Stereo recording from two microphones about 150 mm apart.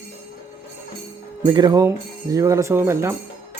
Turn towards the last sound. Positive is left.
turn(degrees=-15)  # may be behind; listen again after turning